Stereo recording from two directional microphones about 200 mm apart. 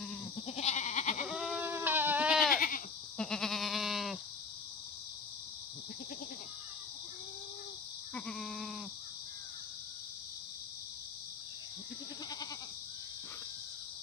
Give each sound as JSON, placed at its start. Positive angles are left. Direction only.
{"t": 0.5, "sound": "goat", "side_deg": 35}
{"t": 1.3, "sound": "goat", "side_deg": -5}
{"t": 2.5, "sound": "goat", "side_deg": 45}
{"t": 3.2, "sound": "goat", "side_deg": 5}
{"t": 8.1, "sound": "goat", "side_deg": 0}